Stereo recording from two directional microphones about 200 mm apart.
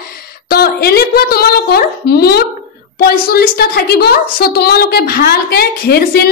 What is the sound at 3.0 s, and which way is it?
A woman's voice, 50° left (ahead or behind).